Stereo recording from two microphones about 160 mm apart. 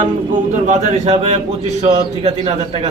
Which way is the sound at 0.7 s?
45° right (ahead or behind).